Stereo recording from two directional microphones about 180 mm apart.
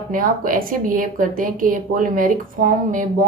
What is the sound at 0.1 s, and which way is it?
A woman's voice, 50° right (ahead or behind).